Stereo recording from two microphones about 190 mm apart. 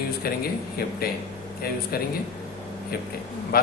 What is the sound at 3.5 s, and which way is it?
Speech, 50° left (ahead or behind).